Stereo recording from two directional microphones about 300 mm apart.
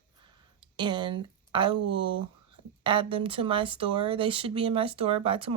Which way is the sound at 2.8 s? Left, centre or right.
Centre.